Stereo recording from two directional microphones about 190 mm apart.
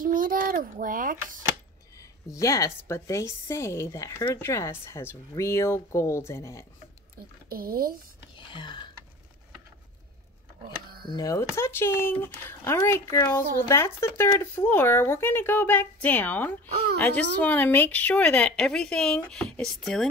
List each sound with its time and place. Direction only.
0.0 s a sound: 45° right (ahead or behind)
2.0 s speech: 15° left (ahead or behind)
7.4 s speech: 50° right (ahead or behind)
8.5 s speech: 25° left (ahead or behind)
10.9 s a sound: 55° right (ahead or behind)
11.1 s speech: 15° left (ahead or behind)